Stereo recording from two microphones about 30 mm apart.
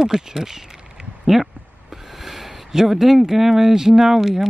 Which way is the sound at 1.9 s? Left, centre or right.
Centre.